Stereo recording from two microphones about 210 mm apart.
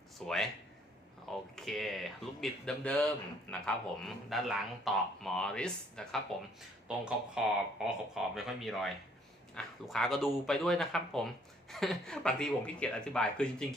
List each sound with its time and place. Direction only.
0.2 s speech: centre (ahead or behind)